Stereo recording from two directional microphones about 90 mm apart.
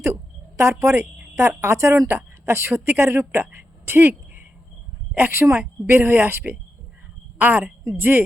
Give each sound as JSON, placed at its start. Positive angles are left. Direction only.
{"t": 0.0, "sound": "a woman's voice", "side_deg": -30}